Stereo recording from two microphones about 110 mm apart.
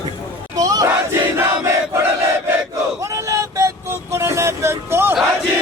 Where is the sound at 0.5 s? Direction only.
35° right (ahead or behind).